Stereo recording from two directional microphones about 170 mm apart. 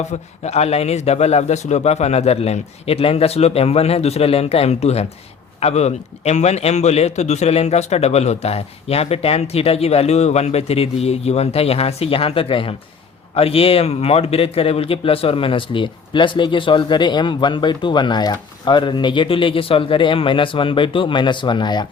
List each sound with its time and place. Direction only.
0.0 s a man's voice: 40° left (ahead or behind); by 21.8 s 25° left (ahead or behind)